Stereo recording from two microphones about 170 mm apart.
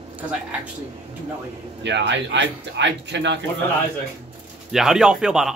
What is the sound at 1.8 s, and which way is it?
A man's voice, 90° right.